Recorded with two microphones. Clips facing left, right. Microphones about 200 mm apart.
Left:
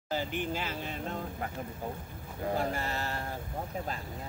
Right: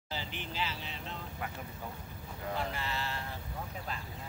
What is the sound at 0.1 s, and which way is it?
Speech, 50° left (ahead or behind).